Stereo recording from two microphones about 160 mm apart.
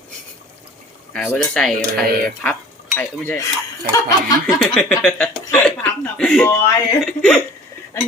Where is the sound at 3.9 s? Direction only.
25° left (ahead or behind).